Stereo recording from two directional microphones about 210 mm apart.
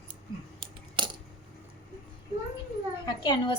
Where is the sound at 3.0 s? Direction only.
20° left (ahead or behind).